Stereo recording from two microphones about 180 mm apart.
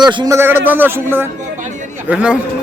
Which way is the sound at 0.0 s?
25° right (ahead or behind).